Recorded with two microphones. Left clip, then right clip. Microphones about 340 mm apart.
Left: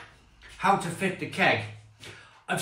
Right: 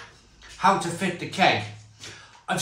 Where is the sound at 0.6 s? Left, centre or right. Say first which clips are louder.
Right 3 dB; centre.